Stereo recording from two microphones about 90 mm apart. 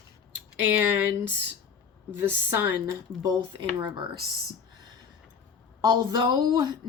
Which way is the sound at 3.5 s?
60° right (ahead or behind).